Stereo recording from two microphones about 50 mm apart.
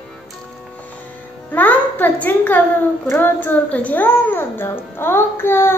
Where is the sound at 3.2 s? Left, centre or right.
Left.